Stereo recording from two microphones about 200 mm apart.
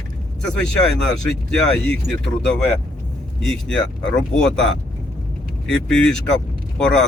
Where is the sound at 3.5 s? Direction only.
5° left (ahead or behind).